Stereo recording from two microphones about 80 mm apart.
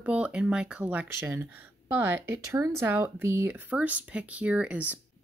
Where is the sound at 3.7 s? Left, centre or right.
Centre.